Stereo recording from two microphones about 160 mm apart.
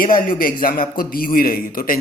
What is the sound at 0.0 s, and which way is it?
Speech, 60° left (ahead or behind).